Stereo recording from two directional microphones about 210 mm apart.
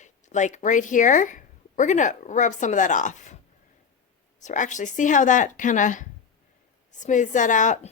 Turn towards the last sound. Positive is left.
turn(degrees=35)  # may be behind; listen again after turning